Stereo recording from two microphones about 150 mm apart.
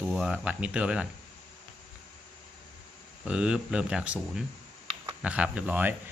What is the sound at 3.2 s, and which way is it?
Speech, 5° right (ahead or behind).